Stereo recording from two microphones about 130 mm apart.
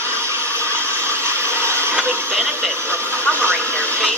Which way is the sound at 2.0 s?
20° right (ahead or behind).